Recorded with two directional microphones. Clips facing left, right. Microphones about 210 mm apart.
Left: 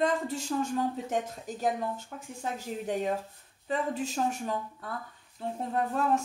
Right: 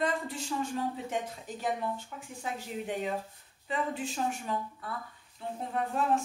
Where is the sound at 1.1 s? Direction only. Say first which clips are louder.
Left 3 dB; 40° left (ahead or behind).